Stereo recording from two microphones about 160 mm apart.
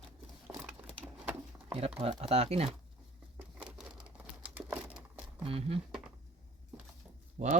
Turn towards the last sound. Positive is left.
turn(degrees=-55)  # may be behind; listen again after turning